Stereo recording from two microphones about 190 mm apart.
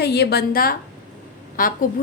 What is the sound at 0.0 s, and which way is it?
A woman's voice, 60° left (ahead or behind).